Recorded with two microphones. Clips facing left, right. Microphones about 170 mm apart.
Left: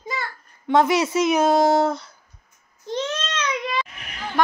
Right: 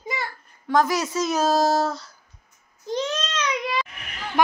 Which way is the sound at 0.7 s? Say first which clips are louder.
Left 3 dB; 25° left (ahead or behind).